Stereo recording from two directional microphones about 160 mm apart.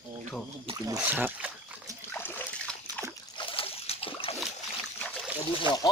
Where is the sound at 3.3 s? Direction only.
35° left (ahead or behind).